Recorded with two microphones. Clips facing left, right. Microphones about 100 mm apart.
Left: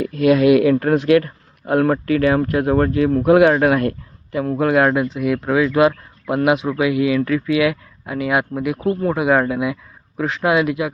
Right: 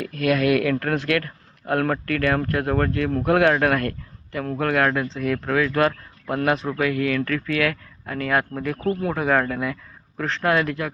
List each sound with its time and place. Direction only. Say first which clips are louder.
0.0 s speech: left 7 dB; 20° left (ahead or behind)
9.0 s speech: left 5 dB; centre (ahead or behind)
9.2 s speech: left 4 dB; 10° left (ahead or behind)